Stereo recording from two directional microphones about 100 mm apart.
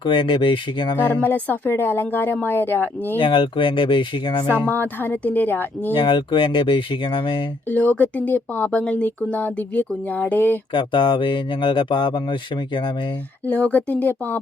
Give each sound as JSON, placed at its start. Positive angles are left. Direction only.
{"t": 0.0, "sound": "speech", "side_deg": 55}
{"t": 0.9, "sound": "speech", "side_deg": 20}
{"t": 3.2, "sound": "speech", "side_deg": 55}
{"t": 4.6, "sound": "speech", "side_deg": 20}
{"t": 6.0, "sound": "speech", "side_deg": 55}
{"t": 7.7, "sound": "speech", "side_deg": 20}
{"t": 10.7, "sound": "speech", "side_deg": 55}
{"t": 13.5, "sound": "speech", "side_deg": 15}